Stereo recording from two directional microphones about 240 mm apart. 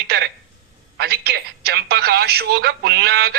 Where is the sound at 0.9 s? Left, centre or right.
Right.